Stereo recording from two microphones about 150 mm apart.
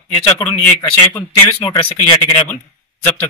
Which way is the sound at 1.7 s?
35° left (ahead or behind).